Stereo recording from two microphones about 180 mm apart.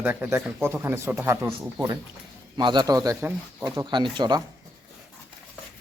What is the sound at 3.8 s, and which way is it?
Speech, 25° right (ahead or behind).